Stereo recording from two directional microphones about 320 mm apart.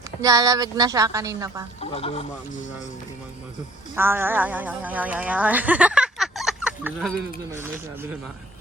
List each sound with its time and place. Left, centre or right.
0.2 s a woman's voice: centre
1.8 s speech: centre
3.9 s a woman's voice: centre